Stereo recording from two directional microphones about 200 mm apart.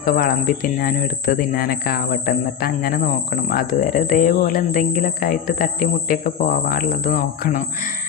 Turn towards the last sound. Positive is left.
turn(degrees=45)  # may be behind; listen again after turning